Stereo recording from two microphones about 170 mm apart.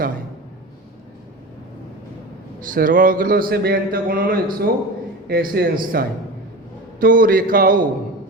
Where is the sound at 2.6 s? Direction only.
55° right (ahead or behind).